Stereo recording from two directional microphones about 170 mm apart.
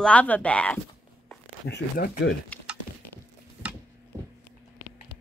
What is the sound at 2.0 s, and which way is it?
Speech, 65° left (ahead or behind).